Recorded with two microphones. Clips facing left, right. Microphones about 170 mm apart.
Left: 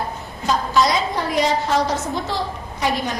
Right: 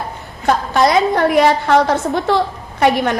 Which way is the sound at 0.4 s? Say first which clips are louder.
Right 4 dB; 55° right (ahead or behind).